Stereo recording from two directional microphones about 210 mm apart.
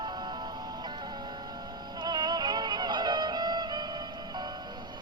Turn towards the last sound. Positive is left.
turn(degrees=-20)  # may be behind; listen again after turning